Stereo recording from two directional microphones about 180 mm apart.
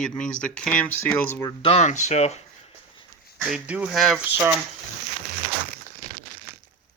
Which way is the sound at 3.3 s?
5° right (ahead or behind).